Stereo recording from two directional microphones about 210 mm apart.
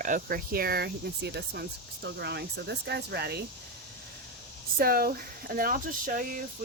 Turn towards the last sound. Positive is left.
turn(degrees=-40)  # may be behind; listen again after turning